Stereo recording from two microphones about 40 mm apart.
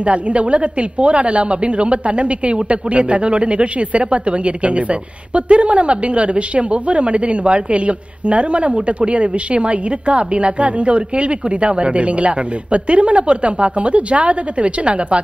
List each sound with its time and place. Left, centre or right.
0.0 s a woman's voice: right